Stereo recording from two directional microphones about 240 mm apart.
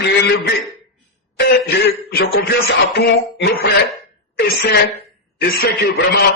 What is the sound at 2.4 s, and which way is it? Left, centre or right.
A man's voice, left.